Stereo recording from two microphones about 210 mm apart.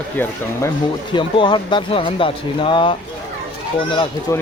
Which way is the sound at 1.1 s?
20° left (ahead or behind).